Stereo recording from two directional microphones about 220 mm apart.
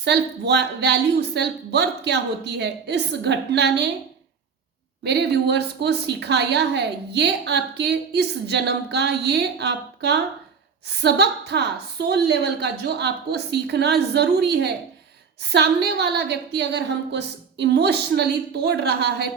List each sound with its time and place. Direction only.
0.0 s a woman's voice: 50° right (ahead or behind)
5.0 s a woman's voice: 50° right (ahead or behind)